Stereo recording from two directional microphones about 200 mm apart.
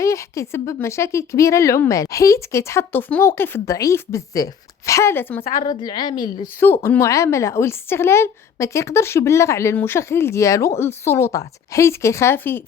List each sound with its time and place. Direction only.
0.0 s a woman's voice: 15° left (ahead or behind)
5.6 s a woman's voice: 20° left (ahead or behind)
6.6 s a woman's voice: 10° left (ahead or behind)